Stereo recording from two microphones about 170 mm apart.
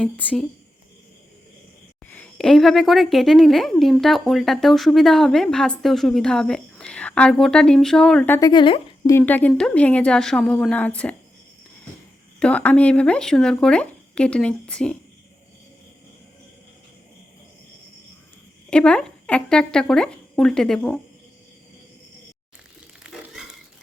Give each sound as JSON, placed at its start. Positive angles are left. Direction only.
{"t": 0.0, "sound": "a woman's voice", "side_deg": 5}
{"t": 2.0, "sound": "a woman's voice", "side_deg": 10}
{"t": 8.4, "sound": "speech", "side_deg": 25}
{"t": 9.0, "sound": "a woman's voice", "side_deg": 10}
{"t": 12.4, "sound": "a woman's voice", "side_deg": 10}
{"t": 18.7, "sound": "a woman's voice", "side_deg": 5}
{"t": 23.0, "sound": "a sound", "side_deg": -5}